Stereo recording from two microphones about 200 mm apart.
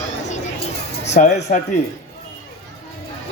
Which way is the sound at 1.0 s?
35° left (ahead or behind).